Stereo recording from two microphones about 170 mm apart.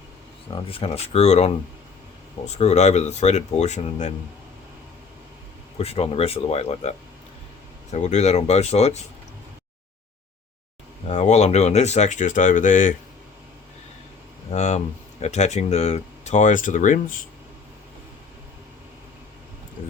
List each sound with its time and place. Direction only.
0.5 s speech: 35° left (ahead or behind)
2.6 s speech: 40° left (ahead or behind)
5.7 s speech: 35° left (ahead or behind)
11.1 s speech: 40° left (ahead or behind)
14.5 s speech: 40° left (ahead or behind)